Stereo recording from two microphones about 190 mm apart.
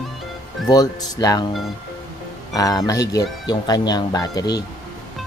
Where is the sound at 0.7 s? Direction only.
20° left (ahead or behind).